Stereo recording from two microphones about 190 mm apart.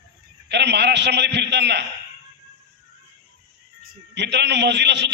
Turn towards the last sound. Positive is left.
turn(degrees=-65)  # may be behind; listen again after turning